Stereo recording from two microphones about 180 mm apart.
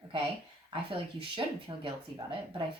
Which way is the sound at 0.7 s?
30° right (ahead or behind).